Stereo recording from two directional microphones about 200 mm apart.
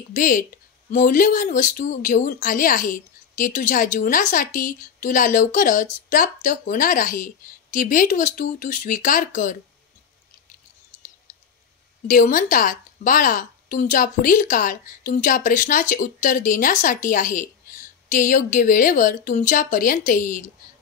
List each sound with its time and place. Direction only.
0.1 s speech: 45° left (ahead or behind)
12.1 s speech: 45° left (ahead or behind)